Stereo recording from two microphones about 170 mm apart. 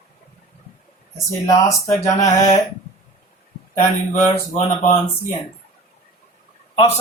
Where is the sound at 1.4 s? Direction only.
20° left (ahead or behind).